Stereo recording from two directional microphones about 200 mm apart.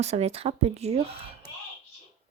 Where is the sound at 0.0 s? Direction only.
30° right (ahead or behind).